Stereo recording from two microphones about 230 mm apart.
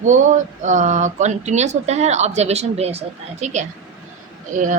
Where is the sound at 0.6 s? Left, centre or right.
Right.